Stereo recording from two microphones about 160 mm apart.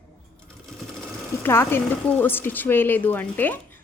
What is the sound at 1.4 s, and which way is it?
Speech, 15° left (ahead or behind).